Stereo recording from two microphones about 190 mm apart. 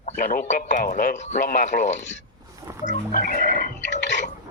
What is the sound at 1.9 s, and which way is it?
Speech, 70° left (ahead or behind).